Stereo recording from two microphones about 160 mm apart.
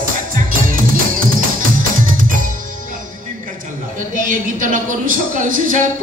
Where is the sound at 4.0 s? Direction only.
55° right (ahead or behind).